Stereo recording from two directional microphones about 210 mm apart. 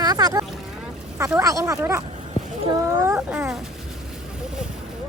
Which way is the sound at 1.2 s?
15° right (ahead or behind).